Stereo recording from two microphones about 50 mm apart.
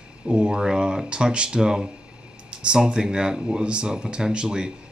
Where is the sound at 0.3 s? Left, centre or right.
Centre.